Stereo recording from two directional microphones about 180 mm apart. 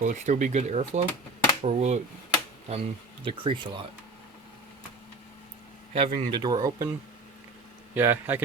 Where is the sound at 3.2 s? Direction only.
30° right (ahead or behind).